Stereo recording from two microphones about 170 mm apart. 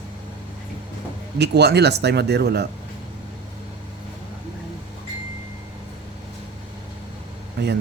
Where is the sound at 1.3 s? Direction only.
80° right.